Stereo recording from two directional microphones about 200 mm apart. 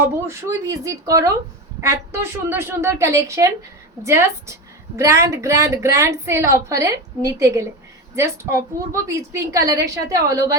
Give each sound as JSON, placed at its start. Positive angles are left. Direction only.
{"t": 0.0, "sound": "a woman's voice", "side_deg": -15}